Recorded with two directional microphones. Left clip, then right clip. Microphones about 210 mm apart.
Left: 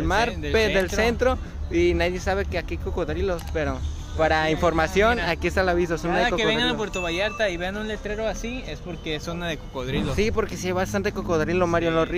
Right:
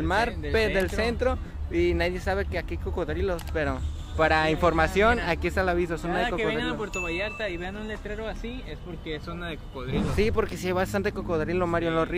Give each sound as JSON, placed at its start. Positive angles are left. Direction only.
{"t": 0.0, "sound": "speech", "side_deg": 5}
{"t": 6.2, "sound": "a sound", "side_deg": 45}
{"t": 9.9, "sound": "speech", "side_deg": -5}